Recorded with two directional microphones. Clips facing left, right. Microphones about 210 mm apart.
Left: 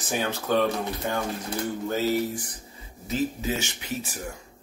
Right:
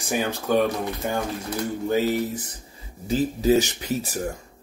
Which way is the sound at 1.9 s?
20° right (ahead or behind).